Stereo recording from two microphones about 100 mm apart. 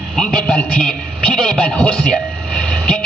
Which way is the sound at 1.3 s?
5° left (ahead or behind).